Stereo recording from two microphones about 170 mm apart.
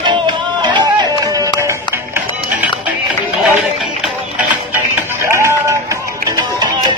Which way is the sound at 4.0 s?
5° right (ahead or behind).